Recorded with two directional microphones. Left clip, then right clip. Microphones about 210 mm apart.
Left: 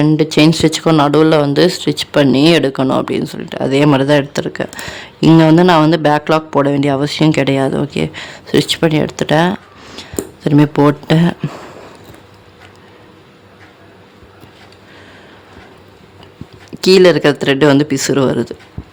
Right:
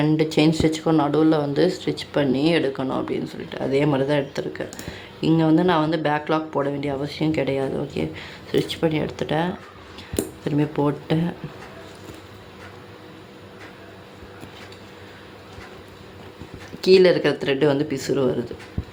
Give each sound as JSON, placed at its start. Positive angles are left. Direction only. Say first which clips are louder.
{"t": 0.0, "sound": "speech", "louder": "left 8 dB", "side_deg": 40}
{"t": 16.8, "sound": "speech", "louder": "left 7 dB", "side_deg": 55}